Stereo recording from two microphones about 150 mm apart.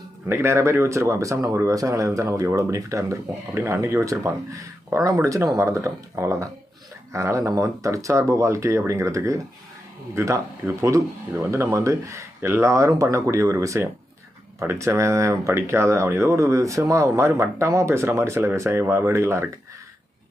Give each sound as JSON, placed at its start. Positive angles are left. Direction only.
{"t": 0.3, "sound": "speech", "side_deg": -15}